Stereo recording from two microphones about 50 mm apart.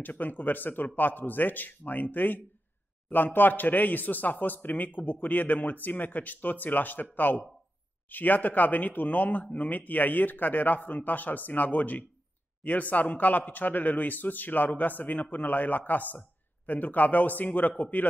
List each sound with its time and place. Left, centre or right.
0.0 s speech: left